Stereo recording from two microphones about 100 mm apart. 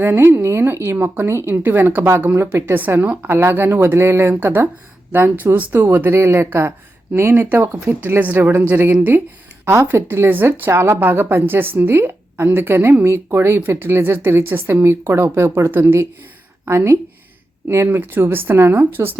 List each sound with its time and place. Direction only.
0.0 s speech: 20° right (ahead or behind)